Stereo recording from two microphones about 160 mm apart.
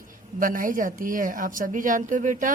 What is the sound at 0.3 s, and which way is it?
Speech, 60° right (ahead or behind).